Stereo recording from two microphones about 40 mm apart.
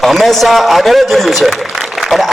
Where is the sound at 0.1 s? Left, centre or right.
Centre.